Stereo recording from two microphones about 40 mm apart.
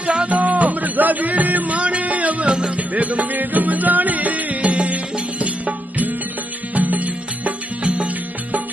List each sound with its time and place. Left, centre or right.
0.2 s music: right